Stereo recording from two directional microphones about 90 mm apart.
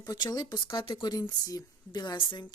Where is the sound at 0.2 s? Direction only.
45° left (ahead or behind).